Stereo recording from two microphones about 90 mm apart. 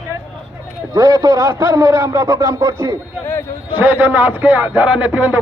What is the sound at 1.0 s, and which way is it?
A man's voice, 40° right (ahead or behind).